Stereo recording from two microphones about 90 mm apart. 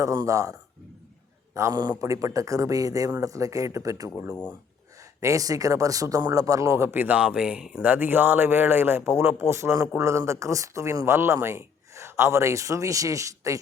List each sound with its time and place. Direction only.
0.0 s speech: 40° right (ahead or behind)
1.7 s speech: 50° right (ahead or behind)
5.2 s speech: 40° right (ahead or behind); by 7.9 s 10° right (ahead or behind)
7.9 s speech: 20° right (ahead or behind)